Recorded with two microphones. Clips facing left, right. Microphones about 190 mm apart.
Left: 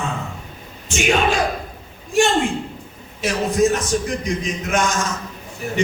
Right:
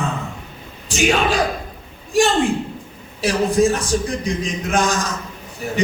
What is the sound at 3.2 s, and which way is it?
Music, 35° right (ahead or behind).